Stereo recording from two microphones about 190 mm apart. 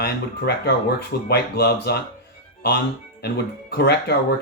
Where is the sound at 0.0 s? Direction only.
60° left (ahead or behind).